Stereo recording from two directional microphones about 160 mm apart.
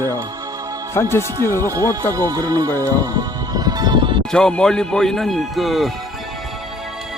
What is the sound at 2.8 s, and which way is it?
Music, 25° right (ahead or behind).